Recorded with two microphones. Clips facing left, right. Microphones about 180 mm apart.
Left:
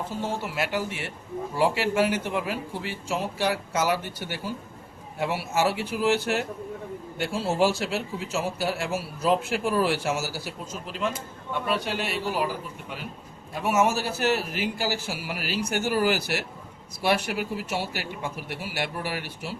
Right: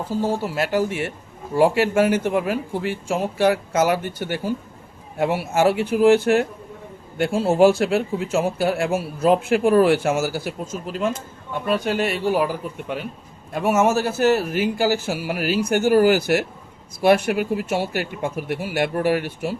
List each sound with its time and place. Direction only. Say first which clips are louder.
0.2 s a man's voice: right 7 dB; 40° right (ahead or behind)
13.5 s a man's voice: right 5 dB; 50° right (ahead or behind)